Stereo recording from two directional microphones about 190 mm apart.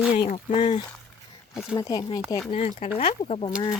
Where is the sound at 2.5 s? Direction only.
40° left (ahead or behind).